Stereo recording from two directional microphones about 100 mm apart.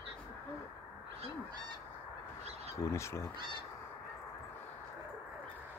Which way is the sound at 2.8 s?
30° left (ahead or behind).